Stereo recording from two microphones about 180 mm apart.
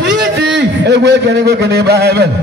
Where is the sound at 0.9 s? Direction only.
70° right (ahead or behind).